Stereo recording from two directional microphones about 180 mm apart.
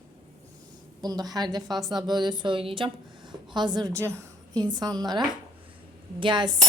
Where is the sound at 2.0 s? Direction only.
25° right (ahead or behind).